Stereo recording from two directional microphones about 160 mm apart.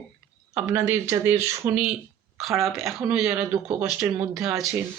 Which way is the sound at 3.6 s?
15° right (ahead or behind).